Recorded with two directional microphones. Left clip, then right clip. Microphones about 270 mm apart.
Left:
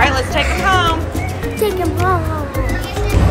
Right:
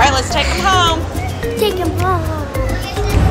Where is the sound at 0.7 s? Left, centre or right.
Centre.